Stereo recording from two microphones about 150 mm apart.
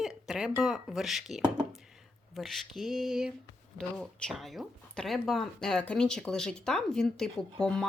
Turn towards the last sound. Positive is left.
turn(degrees=5)  # may be behind; listen again after turning